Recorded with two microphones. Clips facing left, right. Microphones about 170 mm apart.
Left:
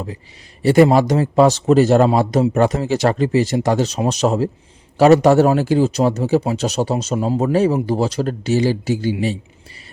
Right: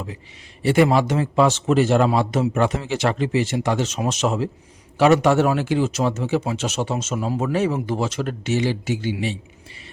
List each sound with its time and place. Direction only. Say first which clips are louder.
0.6 s a man's voice: left 5 dB; 40° left (ahead or behind)